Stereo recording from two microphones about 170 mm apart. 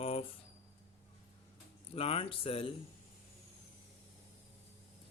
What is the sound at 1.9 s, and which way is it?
Speech, 35° left (ahead or behind).